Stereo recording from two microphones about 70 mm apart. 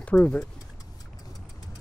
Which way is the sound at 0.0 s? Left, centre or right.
Centre.